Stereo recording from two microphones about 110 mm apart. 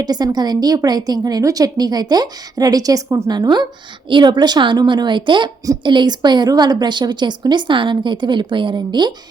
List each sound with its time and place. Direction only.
0.0 s a woman's voice: 40° right (ahead or behind)